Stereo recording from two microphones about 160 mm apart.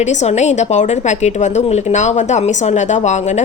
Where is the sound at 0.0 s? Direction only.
45° left (ahead or behind).